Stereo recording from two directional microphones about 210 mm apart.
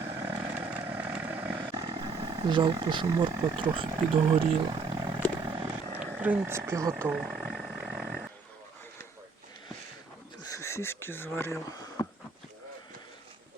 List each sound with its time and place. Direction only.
0.0 s vehicle: 10° right (ahead or behind)
2.0 s speech: 25° right (ahead or behind)
5.5 s vehicle: 20° right (ahead or behind)
6.0 s speech: 5° right (ahead or behind)
6.9 s a sound: 5° right (ahead or behind)
10.5 s a sound: 15° left (ahead or behind)